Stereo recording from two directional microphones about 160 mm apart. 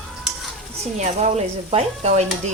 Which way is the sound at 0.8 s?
45° right (ahead or behind).